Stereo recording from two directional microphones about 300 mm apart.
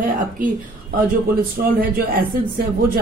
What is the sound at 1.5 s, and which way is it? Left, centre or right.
Speech, right.